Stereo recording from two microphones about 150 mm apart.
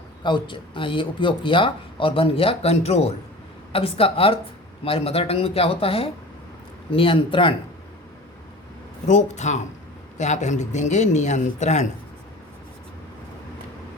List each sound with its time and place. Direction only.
0.2 s speech: 30° left (ahead or behind)
9.0 s speech: 50° left (ahead or behind)